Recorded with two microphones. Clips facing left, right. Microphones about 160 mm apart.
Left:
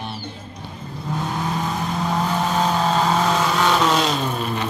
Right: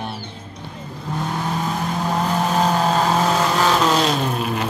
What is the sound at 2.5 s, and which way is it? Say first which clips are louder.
Vehicle: right 1 dB; 5° right (ahead or behind).